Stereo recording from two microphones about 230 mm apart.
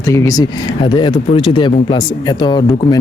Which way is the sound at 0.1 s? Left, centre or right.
Centre.